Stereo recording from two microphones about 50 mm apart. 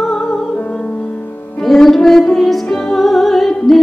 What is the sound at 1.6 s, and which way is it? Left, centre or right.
Music, centre.